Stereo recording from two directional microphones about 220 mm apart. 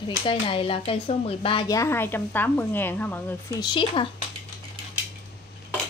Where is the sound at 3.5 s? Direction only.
20° left (ahead or behind).